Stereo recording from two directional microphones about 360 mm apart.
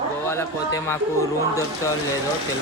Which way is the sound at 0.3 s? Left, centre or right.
Centre.